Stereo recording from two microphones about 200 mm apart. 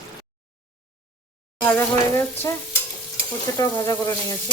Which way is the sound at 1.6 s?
10° left (ahead or behind).